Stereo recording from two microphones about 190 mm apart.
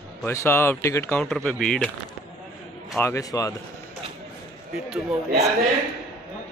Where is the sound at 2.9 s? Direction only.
15° left (ahead or behind).